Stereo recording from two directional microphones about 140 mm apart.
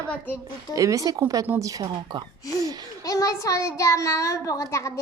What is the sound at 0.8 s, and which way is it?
Speech, 25° right (ahead or behind).